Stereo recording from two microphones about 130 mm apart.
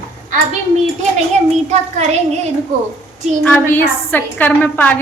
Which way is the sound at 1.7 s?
60° right (ahead or behind).